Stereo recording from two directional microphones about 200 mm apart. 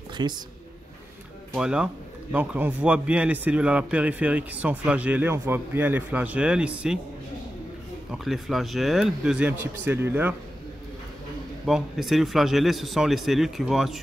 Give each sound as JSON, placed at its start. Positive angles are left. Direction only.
{"t": 0.2, "sound": "speech", "side_deg": -20}
{"t": 1.5, "sound": "a man's voice", "side_deg": -5}
{"t": 8.1, "sound": "a man's voice", "side_deg": 0}
{"t": 11.6, "sound": "a man's voice", "side_deg": 0}